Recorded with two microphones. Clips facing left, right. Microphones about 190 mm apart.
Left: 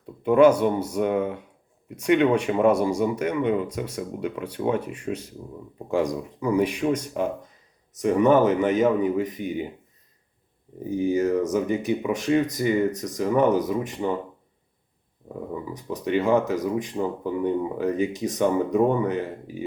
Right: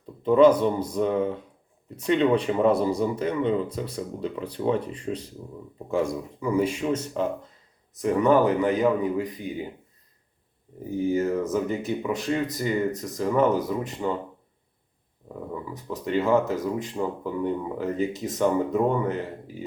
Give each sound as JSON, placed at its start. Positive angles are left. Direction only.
{"t": 0.0, "sound": "speech", "side_deg": 10}
{"t": 10.8, "sound": "speech", "side_deg": 20}
{"t": 15.7, "sound": "speech", "side_deg": 20}